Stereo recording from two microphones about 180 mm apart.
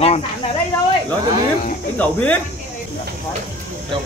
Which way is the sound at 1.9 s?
10° left (ahead or behind).